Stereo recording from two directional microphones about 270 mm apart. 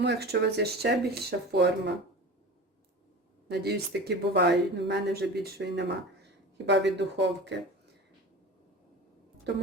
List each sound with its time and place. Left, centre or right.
0.0 s speech: right
3.5 s speech: right
9.5 s speech: right